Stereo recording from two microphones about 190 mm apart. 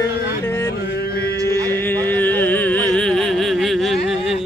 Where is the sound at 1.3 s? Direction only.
20° right (ahead or behind).